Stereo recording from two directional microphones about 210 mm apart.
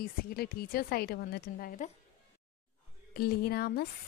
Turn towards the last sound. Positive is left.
turn(degrees=45)  # may be behind; listen again after turning